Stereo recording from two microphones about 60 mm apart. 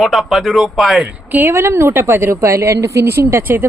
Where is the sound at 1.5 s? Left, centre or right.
Right.